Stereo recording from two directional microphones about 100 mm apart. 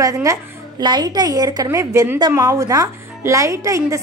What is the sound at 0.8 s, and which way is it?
A woman's voice, 45° right (ahead or behind).